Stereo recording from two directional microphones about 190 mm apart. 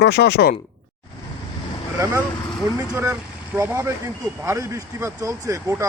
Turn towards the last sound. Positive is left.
turn(degrees=-15)  # may be behind; listen again after turning